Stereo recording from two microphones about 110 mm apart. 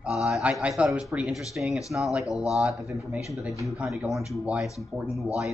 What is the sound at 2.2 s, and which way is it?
Speech, 30° left (ahead or behind).